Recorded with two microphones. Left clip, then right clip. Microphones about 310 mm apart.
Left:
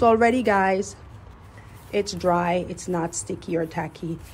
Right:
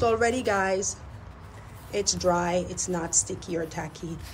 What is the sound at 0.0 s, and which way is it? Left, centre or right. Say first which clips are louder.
A woman's voice: left 6 dB; left.